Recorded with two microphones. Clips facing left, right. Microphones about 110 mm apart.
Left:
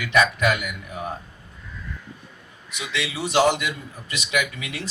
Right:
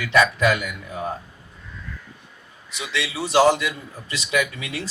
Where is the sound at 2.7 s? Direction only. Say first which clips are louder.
Right 1 dB; 30° right (ahead or behind).